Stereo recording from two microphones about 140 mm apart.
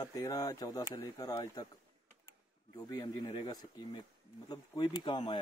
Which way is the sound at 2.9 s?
30° left (ahead or behind).